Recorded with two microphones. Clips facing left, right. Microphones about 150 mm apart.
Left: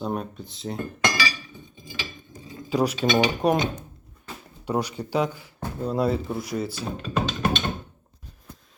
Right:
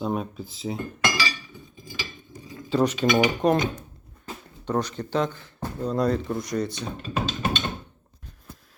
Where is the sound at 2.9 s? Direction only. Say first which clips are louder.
Right 1 dB; 30° left (ahead or behind).